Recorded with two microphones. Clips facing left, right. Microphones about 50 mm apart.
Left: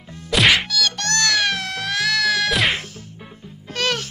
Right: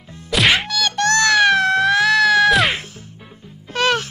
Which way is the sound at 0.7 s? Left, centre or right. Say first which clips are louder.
Right 5 dB; right.